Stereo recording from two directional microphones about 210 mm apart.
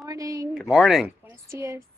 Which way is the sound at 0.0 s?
15° right (ahead or behind).